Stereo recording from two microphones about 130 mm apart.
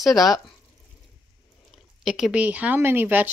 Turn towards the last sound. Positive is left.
turn(degrees=-15)  # may be behind; listen again after turning